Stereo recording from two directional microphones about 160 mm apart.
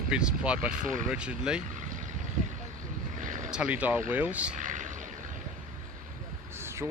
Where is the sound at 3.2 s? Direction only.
55° right (ahead or behind).